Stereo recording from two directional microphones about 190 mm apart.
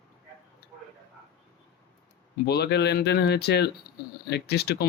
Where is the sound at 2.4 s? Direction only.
60° left (ahead or behind).